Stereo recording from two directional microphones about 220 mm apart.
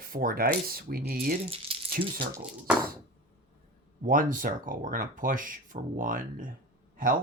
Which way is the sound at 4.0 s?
40° right (ahead or behind).